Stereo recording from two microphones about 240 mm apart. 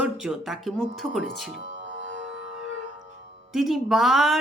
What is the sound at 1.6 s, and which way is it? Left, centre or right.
Music, right.